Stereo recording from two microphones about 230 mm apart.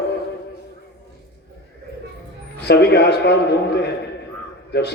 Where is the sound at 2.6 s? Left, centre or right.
Left.